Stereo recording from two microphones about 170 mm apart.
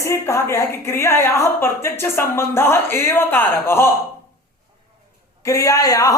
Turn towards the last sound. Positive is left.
turn(degrees=20)  # may be behind; listen again after turning